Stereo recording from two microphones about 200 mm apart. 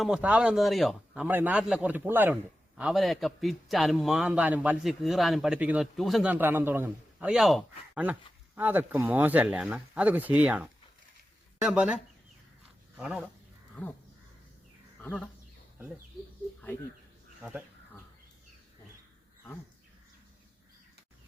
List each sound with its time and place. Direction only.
0.0 s a man's voice: 5° right (ahead or behind)
13.0 s a man's voice: 5° right (ahead or behind)
15.0 s a man's voice: 5° left (ahead or behind)